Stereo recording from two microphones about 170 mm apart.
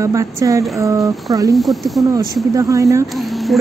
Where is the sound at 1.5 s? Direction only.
Centre (ahead or behind).